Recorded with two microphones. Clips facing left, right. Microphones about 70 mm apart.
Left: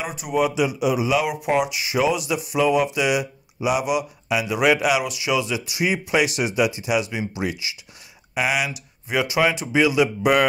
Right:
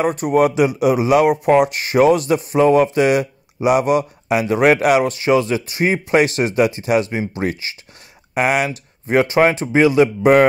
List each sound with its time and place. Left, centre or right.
0.2 s speech: right